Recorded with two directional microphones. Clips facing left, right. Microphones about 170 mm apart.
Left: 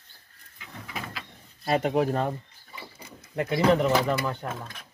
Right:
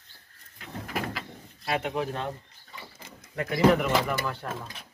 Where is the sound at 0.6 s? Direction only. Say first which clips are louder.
Right 5 dB; 60° right (ahead or behind).